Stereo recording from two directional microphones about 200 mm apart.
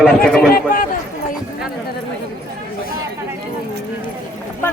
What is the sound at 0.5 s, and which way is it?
Speech, 45° left (ahead or behind).